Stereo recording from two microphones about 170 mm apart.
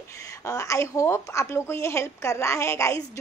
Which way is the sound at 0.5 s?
20° left (ahead or behind).